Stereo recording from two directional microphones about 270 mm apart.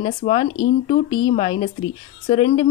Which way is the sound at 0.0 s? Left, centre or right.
Left.